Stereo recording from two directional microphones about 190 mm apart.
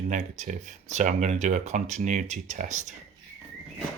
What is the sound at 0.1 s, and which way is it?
Speech, 40° right (ahead or behind).